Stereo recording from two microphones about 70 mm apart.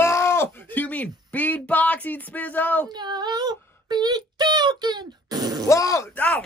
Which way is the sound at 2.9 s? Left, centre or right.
Right.